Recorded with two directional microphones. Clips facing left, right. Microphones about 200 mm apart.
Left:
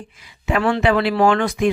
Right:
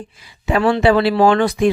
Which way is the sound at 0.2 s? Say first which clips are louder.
Right 3 dB; 35° right (ahead or behind).